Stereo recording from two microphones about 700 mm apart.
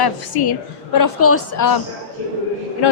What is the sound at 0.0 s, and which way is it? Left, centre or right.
A woman's voice, left.